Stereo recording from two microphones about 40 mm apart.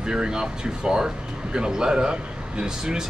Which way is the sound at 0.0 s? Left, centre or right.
Right.